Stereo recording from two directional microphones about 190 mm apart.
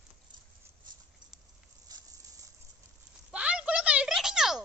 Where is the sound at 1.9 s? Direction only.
20° right (ahead or behind).